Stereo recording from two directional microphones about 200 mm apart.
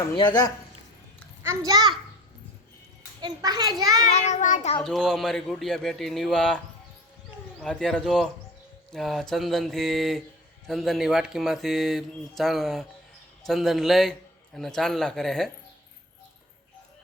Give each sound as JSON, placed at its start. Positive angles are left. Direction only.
{"t": 0.2, "sound": "speech", "side_deg": 20}
{"t": 1.6, "sound": "a child's voice", "side_deg": -20}
{"t": 3.2, "sound": "a child's voice", "side_deg": -20}
{"t": 4.1, "sound": "child singing", "side_deg": 35}
{"t": 4.8, "sound": "a man's voice", "side_deg": 0}
{"t": 7.6, "sound": "a man's voice", "side_deg": 5}